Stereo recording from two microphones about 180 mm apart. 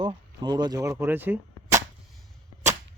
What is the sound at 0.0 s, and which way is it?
Speech, 25° right (ahead or behind).